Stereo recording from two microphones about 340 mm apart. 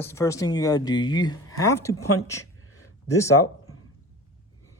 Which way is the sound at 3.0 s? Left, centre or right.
Centre.